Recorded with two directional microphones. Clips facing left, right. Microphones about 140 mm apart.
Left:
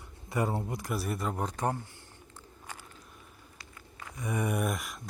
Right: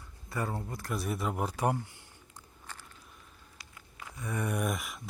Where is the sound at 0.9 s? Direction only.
Centre (ahead or behind).